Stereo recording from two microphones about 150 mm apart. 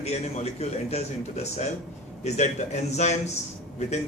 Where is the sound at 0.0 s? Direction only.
45° left (ahead or behind).